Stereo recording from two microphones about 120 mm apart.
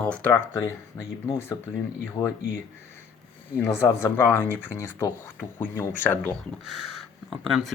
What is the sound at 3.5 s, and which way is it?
Speech, 20° left (ahead or behind).